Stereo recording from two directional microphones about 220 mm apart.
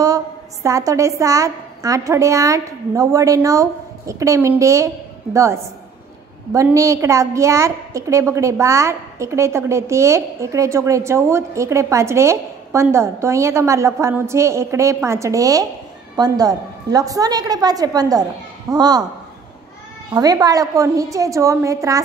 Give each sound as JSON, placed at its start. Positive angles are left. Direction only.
{"t": 0.0, "sound": "a woman's voice", "side_deg": -15}
{"t": 20.2, "sound": "a woman's voice", "side_deg": -15}